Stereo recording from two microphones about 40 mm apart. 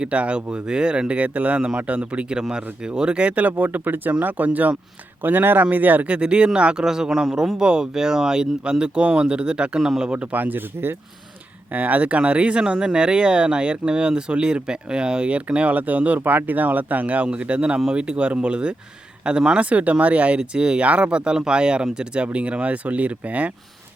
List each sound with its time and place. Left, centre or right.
0.0 s speech: right
3.6 s speech: right
5.2 s speech: right
6.1 s speech: right; by 7.5 s centre
7.6 s speech: right
9.8 s speech: centre
10.3 s speech: right
11.7 s speech: right
20.4 s speech: right